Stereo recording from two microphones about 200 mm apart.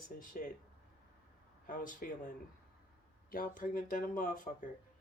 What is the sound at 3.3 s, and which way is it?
Speech, 45° left (ahead or behind).